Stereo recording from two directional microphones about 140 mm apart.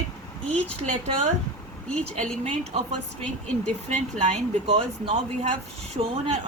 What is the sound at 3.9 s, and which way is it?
Speech, 55° right (ahead or behind).